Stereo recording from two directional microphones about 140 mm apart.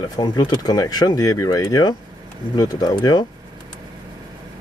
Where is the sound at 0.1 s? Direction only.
30° left (ahead or behind).